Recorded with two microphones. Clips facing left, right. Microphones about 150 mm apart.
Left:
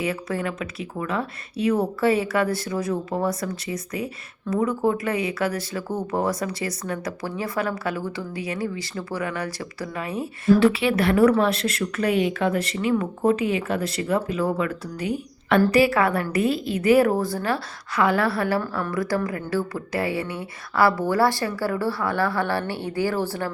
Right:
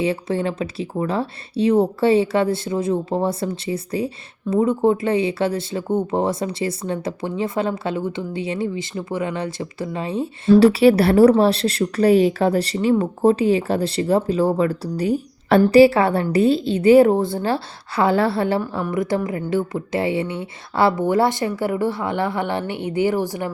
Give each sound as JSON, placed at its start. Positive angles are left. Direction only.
{"t": 0.0, "sound": "speech", "side_deg": -25}